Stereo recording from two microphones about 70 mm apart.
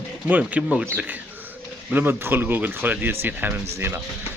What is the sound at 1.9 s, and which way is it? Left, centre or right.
Speech, right.